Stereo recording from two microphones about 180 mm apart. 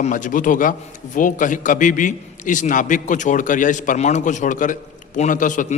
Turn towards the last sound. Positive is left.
turn(degrees=45)  # may be behind; listen again after turning